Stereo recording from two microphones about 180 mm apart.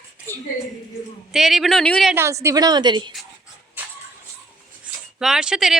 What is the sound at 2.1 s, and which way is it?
A woman's voice, 15° right (ahead or behind).